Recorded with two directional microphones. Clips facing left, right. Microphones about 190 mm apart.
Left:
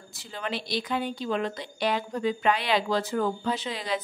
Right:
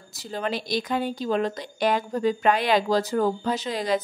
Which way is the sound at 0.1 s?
40° right (ahead or behind).